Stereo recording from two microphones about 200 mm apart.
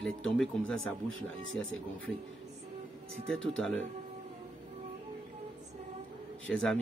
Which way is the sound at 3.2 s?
Centre (ahead or behind).